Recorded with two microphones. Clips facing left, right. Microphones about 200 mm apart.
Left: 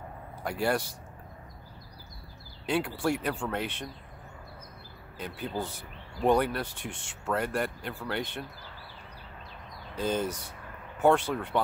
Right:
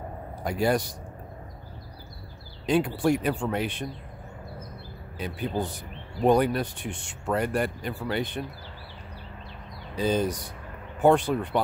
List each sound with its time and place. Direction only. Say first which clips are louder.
0.4 s speech: right 4 dB; 15° right (ahead or behind)
2.6 s speech: right 5 dB; 15° right (ahead or behind)
5.1 s speech: right 5 dB; 15° right (ahead or behind)
9.9 s speech: right 4 dB; 15° right (ahead or behind)